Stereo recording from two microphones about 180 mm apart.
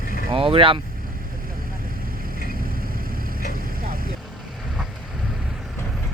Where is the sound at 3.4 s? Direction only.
55° right (ahead or behind).